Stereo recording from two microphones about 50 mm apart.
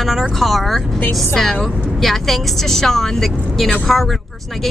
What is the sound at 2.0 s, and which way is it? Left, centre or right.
Speech, centre.